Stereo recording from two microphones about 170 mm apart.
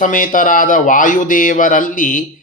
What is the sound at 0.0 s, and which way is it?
A man's voice, 50° left (ahead or behind).